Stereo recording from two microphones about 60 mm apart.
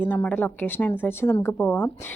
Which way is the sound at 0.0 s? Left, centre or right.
Left.